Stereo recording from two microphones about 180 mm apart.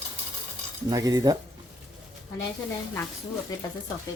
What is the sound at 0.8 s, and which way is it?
Speech, 20° right (ahead or behind).